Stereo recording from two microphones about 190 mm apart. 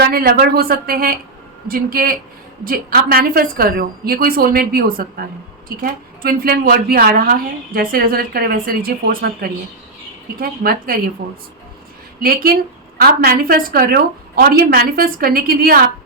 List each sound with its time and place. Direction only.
0.0 s a woman's voice: 55° right (ahead or behind)
12.2 s a woman's voice: 50° right (ahead or behind)